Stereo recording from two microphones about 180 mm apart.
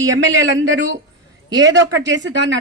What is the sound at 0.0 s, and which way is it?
Speech, 90° right.